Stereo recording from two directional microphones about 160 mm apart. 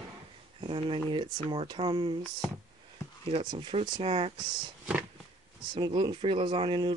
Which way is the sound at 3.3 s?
30° right (ahead or behind).